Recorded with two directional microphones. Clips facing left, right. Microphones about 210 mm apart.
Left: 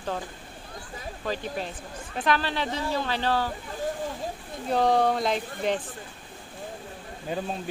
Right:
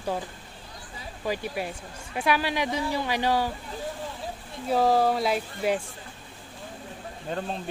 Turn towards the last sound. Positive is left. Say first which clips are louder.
# left 1 dB
turn(degrees=10)  # may be behind; listen again after turning